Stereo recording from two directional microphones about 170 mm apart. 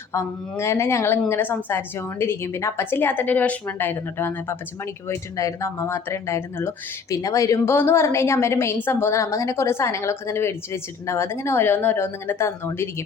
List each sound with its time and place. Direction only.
0.1 s speech: 15° left (ahead or behind)